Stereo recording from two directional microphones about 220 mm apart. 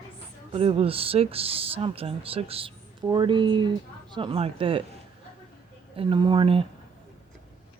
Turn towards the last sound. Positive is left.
turn(degrees=-25)  # may be behind; listen again after turning